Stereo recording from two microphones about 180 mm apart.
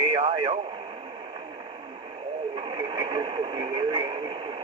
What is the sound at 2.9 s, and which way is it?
Speech, 25° right (ahead or behind).